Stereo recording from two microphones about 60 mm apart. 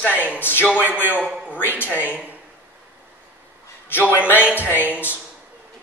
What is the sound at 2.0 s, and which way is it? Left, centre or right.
Speech, right.